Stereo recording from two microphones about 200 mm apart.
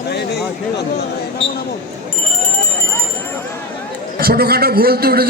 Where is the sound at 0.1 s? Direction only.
55° left (ahead or behind).